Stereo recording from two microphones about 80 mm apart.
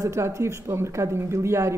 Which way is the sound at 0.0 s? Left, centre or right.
Right.